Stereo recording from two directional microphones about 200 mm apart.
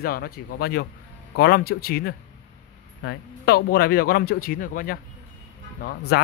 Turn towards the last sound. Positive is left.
turn(degrees=55)  # may be behind; listen again after turning